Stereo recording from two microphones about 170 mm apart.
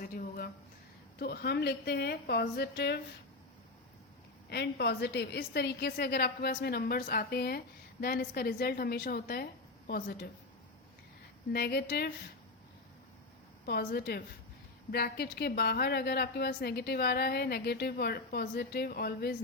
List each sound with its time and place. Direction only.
0.0 s a sound: 60° left (ahead or behind)
1.2 s a woman's voice: 70° left (ahead or behind)
4.4 s a woman's voice: 75° left (ahead or behind)
11.5 s a woman's voice: 65° left (ahead or behind)
13.7 s a woman's voice: 70° left (ahead or behind)